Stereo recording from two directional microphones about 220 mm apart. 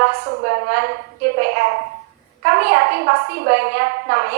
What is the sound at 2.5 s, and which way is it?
A woman's voice, 45° right (ahead or behind).